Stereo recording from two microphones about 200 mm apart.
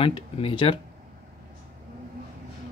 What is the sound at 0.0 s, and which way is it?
Speech, 25° left (ahead or behind).